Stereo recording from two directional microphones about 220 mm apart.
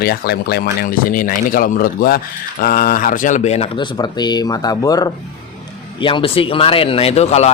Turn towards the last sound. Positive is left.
turn(degrees=30)  # may be behind; listen again after turning